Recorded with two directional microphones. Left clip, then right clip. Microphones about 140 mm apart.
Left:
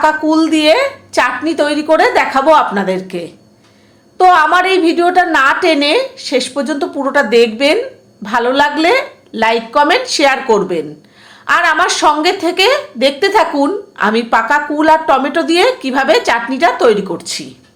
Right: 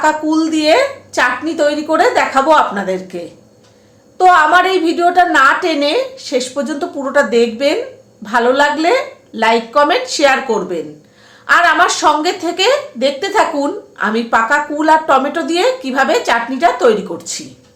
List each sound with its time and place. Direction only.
0.0 s a woman's voice: 35° left (ahead or behind)